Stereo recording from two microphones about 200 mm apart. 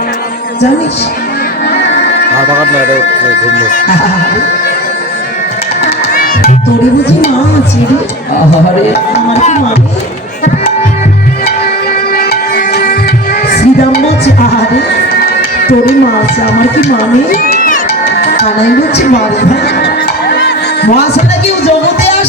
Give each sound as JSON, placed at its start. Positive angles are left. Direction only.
{"t": 3.6, "sound": "music", "side_deg": 40}
{"t": 8.9, "sound": "music", "side_deg": 35}
{"t": 12.1, "sound": "music", "side_deg": 50}
{"t": 15.4, "sound": "music", "side_deg": 50}
{"t": 17.3, "sound": "speech", "side_deg": 45}
{"t": 19.8, "sound": "music", "side_deg": 55}